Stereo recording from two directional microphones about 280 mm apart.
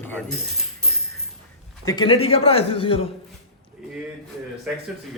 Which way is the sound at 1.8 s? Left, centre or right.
Centre.